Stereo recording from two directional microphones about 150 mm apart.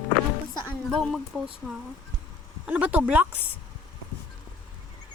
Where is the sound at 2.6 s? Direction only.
10° right (ahead or behind).